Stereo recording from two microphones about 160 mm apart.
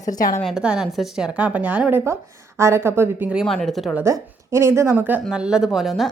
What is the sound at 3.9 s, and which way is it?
A woman's voice, 20° right (ahead or behind).